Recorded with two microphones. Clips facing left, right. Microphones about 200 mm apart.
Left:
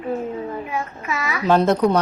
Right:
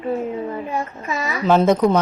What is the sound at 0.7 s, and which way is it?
Speech, 35° right (ahead or behind).